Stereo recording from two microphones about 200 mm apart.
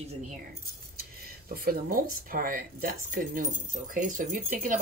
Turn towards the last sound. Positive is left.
turn(degrees=-40)  # may be behind; listen again after turning